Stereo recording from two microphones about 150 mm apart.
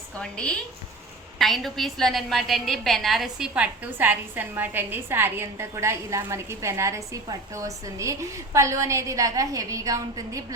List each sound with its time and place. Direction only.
0.2 s a woman's voice: 5° left (ahead or behind); by 10.4 s 20° right (ahead or behind)